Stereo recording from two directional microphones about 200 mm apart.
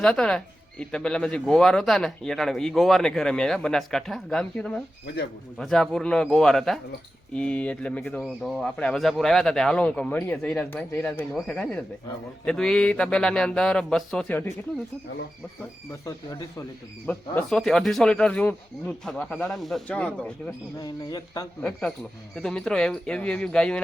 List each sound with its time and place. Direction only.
0.0 s speech: 5° left (ahead or behind)
15.9 s speech: 15° left (ahead or behind)
17.1 s speech: 5° left (ahead or behind)
20.7 s speech: 20° left (ahead or behind)
21.6 s speech: 5° left (ahead or behind)